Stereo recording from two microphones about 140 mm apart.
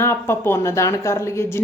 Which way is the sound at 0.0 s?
15° left (ahead or behind).